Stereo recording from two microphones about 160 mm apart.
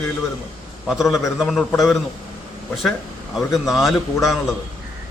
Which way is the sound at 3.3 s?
Centre (ahead or behind).